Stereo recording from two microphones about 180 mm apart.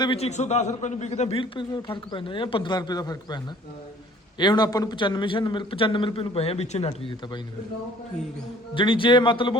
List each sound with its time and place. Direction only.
0.0 s a man's voice: 30° left (ahead or behind)
8.7 s a man's voice: 30° left (ahead or behind)